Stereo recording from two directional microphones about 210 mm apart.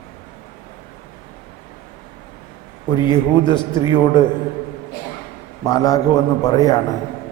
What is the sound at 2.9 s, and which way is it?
A man's voice, 20° left (ahead or behind).